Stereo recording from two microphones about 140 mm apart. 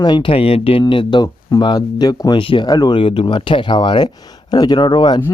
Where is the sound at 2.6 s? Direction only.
30° left (ahead or behind).